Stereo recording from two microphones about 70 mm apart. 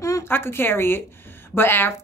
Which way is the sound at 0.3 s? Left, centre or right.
Left.